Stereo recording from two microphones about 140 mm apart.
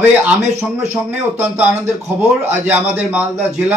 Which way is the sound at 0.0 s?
15° right (ahead or behind).